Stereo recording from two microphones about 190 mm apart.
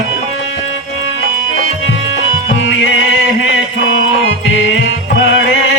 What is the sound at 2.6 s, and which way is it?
Music, 75° left (ahead or behind).